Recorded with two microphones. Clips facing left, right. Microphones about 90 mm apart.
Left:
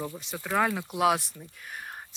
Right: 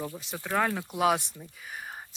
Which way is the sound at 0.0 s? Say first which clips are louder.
Left 1 dB; centre (ahead or behind).